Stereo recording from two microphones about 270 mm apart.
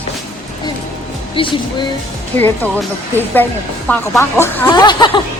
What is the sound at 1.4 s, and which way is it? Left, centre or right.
Speech, centre.